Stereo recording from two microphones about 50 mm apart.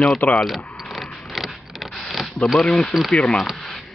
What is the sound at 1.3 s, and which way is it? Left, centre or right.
Vehicle, centre.